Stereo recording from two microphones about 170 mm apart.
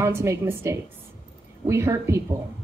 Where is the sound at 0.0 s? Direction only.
15° right (ahead or behind).